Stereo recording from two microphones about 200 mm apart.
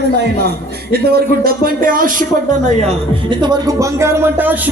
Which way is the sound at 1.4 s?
45° right (ahead or behind).